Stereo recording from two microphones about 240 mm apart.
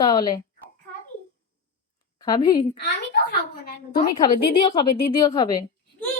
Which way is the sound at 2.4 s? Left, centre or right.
Centre.